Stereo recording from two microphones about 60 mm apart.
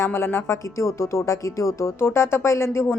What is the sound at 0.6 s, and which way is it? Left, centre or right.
Speech, left.